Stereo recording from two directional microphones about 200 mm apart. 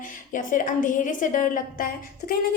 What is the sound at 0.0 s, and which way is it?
A woman's voice, 40° left (ahead or behind).